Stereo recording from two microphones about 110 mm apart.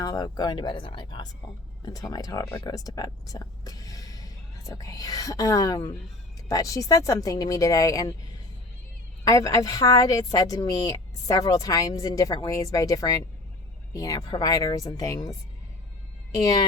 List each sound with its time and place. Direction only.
0.0 s a woman's voice: 35° left (ahead or behind)
9.2 s a woman's voice: 30° left (ahead or behind)
16.4 s a woman's voice: 35° left (ahead or behind)